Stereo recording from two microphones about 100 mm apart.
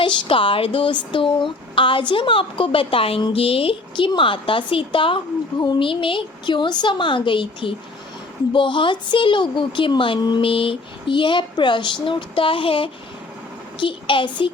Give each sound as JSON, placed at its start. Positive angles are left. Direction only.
{"t": 0.0, "sound": "a woman's voice", "side_deg": 55}